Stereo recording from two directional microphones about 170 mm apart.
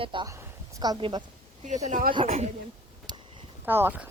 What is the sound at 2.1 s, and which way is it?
Speech, 35° right (ahead or behind).